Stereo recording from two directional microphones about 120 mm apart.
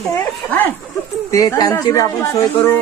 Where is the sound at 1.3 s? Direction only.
30° left (ahead or behind).